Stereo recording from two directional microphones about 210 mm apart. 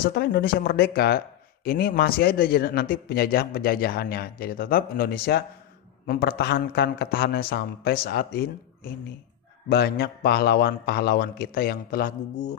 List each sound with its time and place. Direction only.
0.0 s speech: 50° left (ahead or behind)
9.7 s speech: 50° left (ahead or behind)